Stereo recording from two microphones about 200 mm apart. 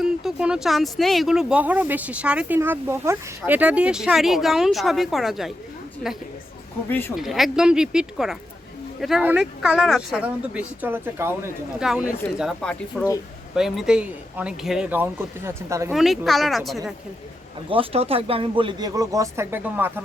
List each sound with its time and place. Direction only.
0.0 s speech: centre (ahead or behind)
7.2 s speech: centre (ahead or behind)
15.9 s speech: centre (ahead or behind)
17.7 s speech: 30° right (ahead or behind); by 19.9 s 10° right (ahead or behind)